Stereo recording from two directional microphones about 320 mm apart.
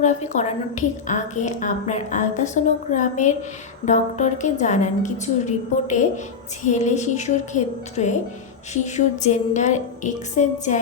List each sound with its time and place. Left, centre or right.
0.0 s a woman's voice: left